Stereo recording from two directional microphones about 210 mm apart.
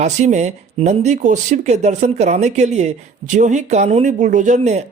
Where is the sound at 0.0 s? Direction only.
35° right (ahead or behind).